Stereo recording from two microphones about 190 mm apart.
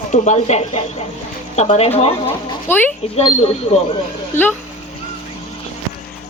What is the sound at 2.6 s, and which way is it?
Speech, 10° left (ahead or behind).